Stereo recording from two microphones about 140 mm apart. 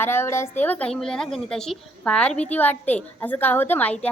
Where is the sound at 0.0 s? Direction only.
15° left (ahead or behind).